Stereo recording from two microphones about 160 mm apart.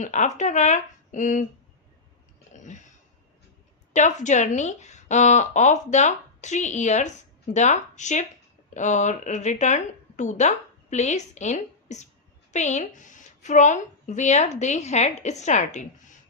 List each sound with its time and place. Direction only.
0.0 s a woman's voice: 50° left (ahead or behind)
2.5 s a sound: 50° left (ahead or behind)
3.9 s a woman's voice: 50° left (ahead or behind)